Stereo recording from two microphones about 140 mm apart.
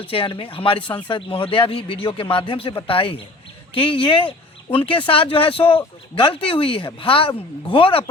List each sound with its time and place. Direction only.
0.1 s speech: 40° left (ahead or behind)